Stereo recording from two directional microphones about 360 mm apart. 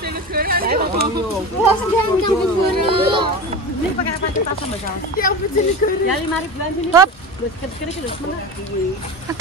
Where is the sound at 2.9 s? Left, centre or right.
Centre.